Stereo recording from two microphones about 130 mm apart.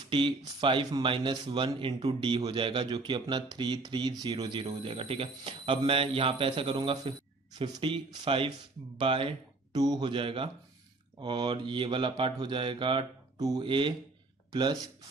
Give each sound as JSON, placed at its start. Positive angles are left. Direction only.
{"t": 0.1, "sound": "speech", "side_deg": -40}